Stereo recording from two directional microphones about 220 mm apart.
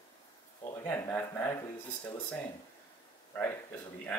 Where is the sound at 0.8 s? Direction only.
10° left (ahead or behind).